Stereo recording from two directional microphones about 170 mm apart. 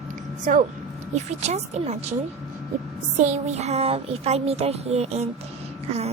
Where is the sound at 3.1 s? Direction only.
45° right (ahead or behind).